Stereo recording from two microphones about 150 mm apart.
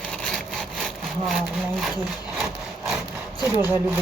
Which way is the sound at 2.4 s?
5° right (ahead or behind).